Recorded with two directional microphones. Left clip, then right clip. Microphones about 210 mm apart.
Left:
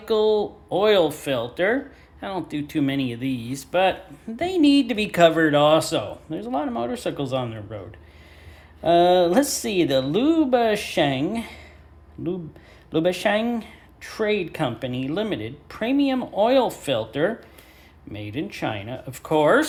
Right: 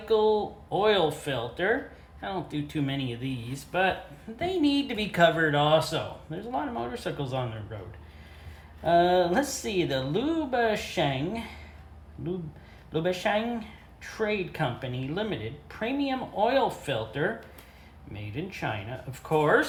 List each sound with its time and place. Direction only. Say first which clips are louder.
0.1 s speech: left 4 dB; 40° left (ahead or behind)
8.8 s speech: left 5 dB; 45° left (ahead or behind)
12.9 s speech: left 6 dB; 45° left (ahead or behind)